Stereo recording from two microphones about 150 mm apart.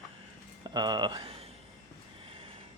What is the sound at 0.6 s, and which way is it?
Speech, 30° right (ahead or behind).